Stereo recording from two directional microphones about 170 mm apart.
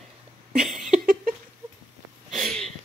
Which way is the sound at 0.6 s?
5° right (ahead or behind).